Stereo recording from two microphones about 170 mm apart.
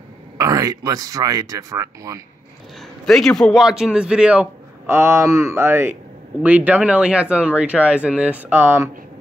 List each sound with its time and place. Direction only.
0.4 s speech: 20° right (ahead or behind)
3.1 s a man's voice: centre (ahead or behind); by 8.9 s 15° right (ahead or behind)